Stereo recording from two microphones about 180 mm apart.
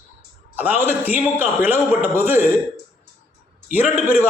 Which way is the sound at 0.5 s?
10° right (ahead or behind).